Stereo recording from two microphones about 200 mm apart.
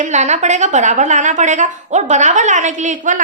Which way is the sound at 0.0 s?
35° right (ahead or behind).